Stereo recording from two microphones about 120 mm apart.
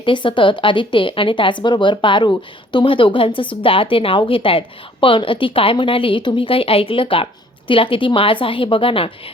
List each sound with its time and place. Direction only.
0.0 s a woman's voice: 45° left (ahead or behind)